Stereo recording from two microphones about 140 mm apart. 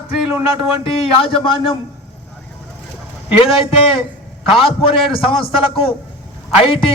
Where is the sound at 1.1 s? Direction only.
40° left (ahead or behind).